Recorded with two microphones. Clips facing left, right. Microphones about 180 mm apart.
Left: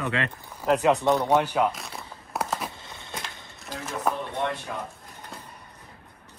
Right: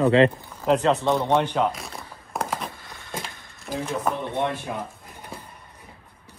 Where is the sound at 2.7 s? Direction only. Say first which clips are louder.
Even; 25° left (ahead or behind).